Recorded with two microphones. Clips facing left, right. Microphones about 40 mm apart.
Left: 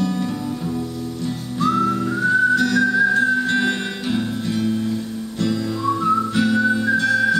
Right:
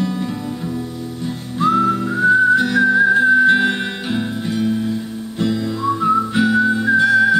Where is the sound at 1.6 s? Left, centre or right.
Centre.